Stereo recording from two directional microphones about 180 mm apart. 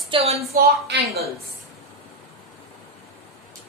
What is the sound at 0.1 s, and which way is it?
Speech, 35° right (ahead or behind).